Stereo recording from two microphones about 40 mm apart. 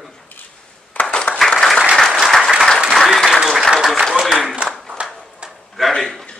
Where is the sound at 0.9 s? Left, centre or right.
Left.